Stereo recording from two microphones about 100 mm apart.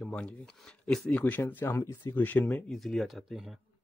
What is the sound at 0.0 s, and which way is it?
Speech, 10° left (ahead or behind).